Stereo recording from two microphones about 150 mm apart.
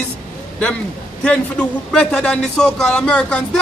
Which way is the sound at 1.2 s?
10° left (ahead or behind).